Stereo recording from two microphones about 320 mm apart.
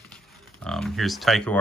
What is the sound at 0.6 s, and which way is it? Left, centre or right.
Speech, centre.